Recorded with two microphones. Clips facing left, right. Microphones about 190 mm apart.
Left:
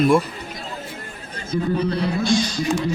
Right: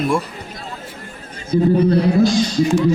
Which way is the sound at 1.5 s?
30° right (ahead or behind).